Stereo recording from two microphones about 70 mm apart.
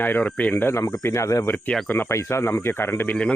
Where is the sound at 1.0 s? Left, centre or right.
Left.